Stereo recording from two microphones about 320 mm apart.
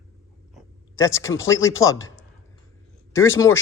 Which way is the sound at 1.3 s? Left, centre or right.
Left.